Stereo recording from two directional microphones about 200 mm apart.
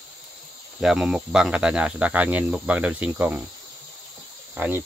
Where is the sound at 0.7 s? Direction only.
Centre (ahead or behind).